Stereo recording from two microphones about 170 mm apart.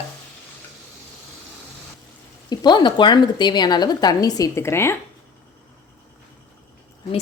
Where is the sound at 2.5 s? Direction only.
25° left (ahead or behind).